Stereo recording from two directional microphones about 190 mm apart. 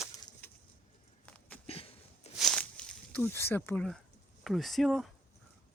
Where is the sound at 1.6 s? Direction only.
30° left (ahead or behind).